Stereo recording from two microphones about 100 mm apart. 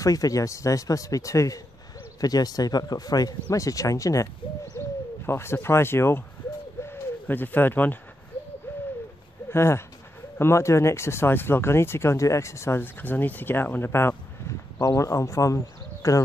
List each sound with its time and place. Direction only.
0.0 s a man's voice: 35° left (ahead or behind)
6.8 s bird: 20° left (ahead or behind)
9.5 s speech: 25° left (ahead or behind)